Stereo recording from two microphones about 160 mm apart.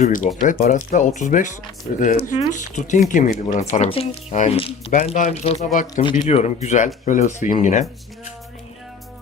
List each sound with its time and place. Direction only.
0.0 s speech: 55° left (ahead or behind)